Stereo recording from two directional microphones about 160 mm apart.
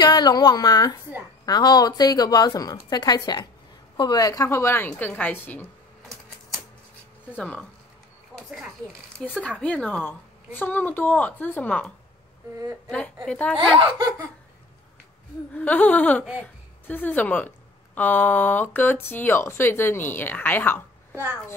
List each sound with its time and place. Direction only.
0.0 s a woman's voice: 25° left (ahead or behind)
7.3 s speech: 5° left (ahead or behind)
8.4 s speech: 5° right (ahead or behind)
9.2 s speech: 5° left (ahead or behind)
12.9 s speech: 5° left (ahead or behind)
13.6 s speech: 30° right (ahead or behind)
15.5 s speech: 10° left (ahead or behind)
21.1 s a child's voice: 15° right (ahead or behind)